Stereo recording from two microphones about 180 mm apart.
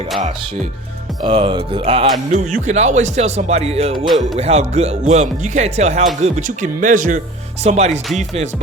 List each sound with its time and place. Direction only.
1.2 s speech: 30° right (ahead or behind)
2.3 s speech: 45° right (ahead or behind)